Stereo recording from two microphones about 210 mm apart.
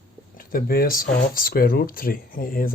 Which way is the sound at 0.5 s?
45° left (ahead or behind).